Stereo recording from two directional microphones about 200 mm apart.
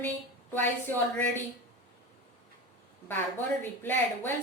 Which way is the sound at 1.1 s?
5° left (ahead or behind).